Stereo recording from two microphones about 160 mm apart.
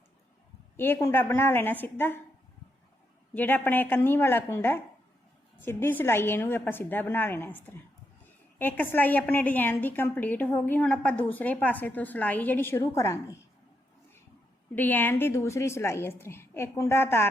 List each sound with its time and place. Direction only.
0.8 s a woman's voice: 15° left (ahead or behind)
3.3 s a woman's voice: 10° left (ahead or behind)
14.8 s a woman's voice: 10° left (ahead or behind)